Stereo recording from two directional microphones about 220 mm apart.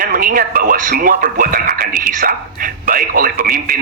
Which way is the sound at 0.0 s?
40° right (ahead or behind).